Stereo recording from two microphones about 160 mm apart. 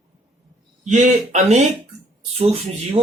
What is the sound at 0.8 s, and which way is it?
Speech, 50° right (ahead or behind).